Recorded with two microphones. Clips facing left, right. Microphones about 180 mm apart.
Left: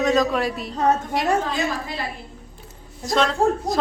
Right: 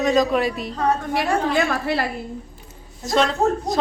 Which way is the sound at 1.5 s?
70° right (ahead or behind).